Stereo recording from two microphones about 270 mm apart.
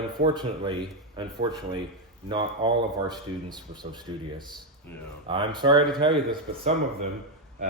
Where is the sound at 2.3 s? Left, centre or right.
Centre.